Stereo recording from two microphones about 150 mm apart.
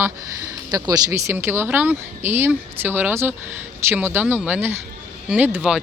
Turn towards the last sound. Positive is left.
turn(degrees=-10)  # may be behind; listen again after turning